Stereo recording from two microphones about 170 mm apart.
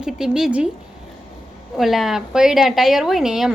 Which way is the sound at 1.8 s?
Centre (ahead or behind).